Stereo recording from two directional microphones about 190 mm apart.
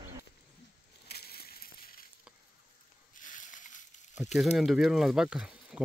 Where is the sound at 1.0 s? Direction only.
55° left (ahead or behind).